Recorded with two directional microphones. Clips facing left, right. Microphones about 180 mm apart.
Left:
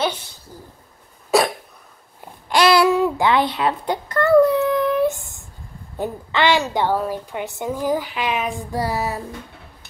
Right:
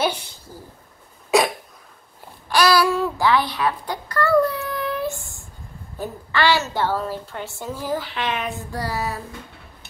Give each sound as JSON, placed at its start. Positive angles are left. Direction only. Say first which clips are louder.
{"t": 2.5, "sound": "babbling", "louder": "left 3 dB", "side_deg": 25}
{"t": 5.9, "sound": "a woman's voice", "louder": "left 2 dB", "side_deg": 20}
{"t": 8.7, "sound": "a sound", "louder": "left 4 dB", "side_deg": 20}